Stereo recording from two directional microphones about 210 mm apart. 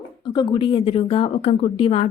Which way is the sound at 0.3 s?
20° left (ahead or behind).